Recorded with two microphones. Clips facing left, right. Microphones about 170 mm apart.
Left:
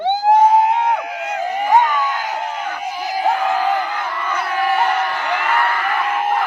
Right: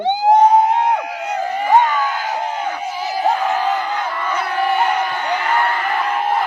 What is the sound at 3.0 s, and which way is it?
Crowd, 10° left (ahead or behind).